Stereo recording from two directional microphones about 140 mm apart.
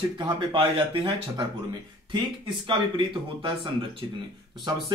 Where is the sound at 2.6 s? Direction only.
35° right (ahead or behind).